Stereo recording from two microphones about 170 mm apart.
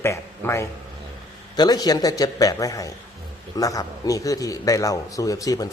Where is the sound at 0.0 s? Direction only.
15° left (ahead or behind).